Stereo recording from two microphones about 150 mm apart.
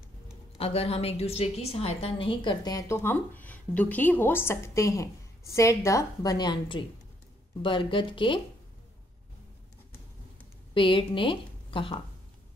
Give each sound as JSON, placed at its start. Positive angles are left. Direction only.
{"t": 0.6, "sound": "a woman's voice", "side_deg": 40}
{"t": 10.7, "sound": "a woman's voice", "side_deg": 35}